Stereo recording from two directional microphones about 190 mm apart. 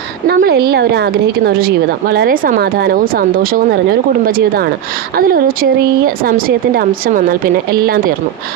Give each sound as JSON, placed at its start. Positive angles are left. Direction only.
{"t": 0.3, "sound": "a woman's voice", "side_deg": -55}